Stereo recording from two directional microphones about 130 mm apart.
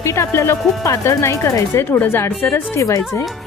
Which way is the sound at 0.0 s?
20° left (ahead or behind).